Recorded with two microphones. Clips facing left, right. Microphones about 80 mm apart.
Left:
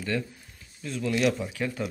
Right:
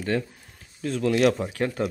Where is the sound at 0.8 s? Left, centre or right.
Right.